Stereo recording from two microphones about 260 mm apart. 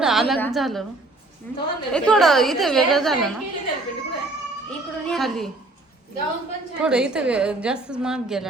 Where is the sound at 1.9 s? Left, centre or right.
Centre.